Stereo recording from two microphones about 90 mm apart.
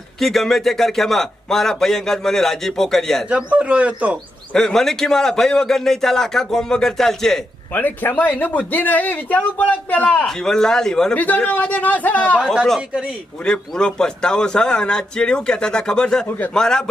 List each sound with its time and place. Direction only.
0.2 s a man's voice: 5° left (ahead or behind)
3.2 s speech: 15° right (ahead or behind)
4.5 s a man's voice: 5° left (ahead or behind)
7.7 s speech: 20° left (ahead or behind)
10.2 s a man's voice: 5° left (ahead or behind)
11.2 s a man's voice: 20° left (ahead or behind)
13.4 s a man's voice: 10° left (ahead or behind)